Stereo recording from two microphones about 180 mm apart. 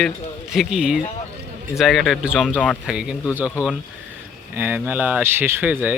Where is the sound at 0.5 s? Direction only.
Centre (ahead or behind).